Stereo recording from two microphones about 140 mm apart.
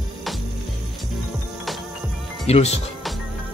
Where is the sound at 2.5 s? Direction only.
50° left (ahead or behind).